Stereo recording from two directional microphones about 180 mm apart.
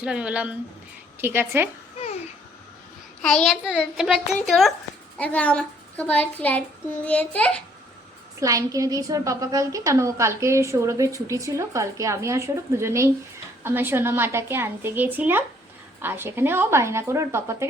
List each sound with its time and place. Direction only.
0.0 s a woman's voice: 5° right (ahead or behind)
3.2 s a child's voice: centre (ahead or behind)
8.4 s a woman's voice: 20° right (ahead or behind)